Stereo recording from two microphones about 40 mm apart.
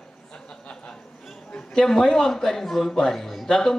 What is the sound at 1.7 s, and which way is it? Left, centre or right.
A woman's voice, centre.